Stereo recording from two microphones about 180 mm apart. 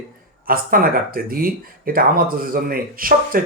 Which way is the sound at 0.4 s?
55° right (ahead or behind).